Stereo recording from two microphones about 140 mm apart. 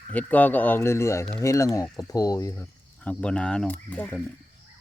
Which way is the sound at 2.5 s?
10° left (ahead or behind).